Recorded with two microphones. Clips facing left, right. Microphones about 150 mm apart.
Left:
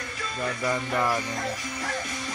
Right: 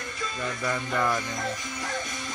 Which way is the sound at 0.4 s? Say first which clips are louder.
Left 3 dB; 15° left (ahead or behind).